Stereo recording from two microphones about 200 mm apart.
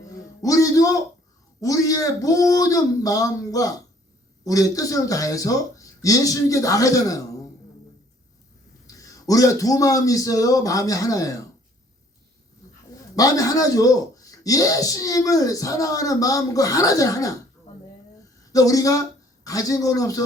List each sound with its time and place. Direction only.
0.0 s a sound: 15° left (ahead or behind)
1.6 s speech: 15° left (ahead or behind)
8.9 s speech: 15° left (ahead or behind)
13.1 s speech: 15° left (ahead or behind)
18.5 s speech: 15° left (ahead or behind)